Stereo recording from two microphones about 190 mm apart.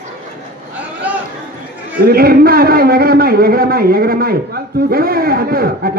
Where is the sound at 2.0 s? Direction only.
55° right (ahead or behind).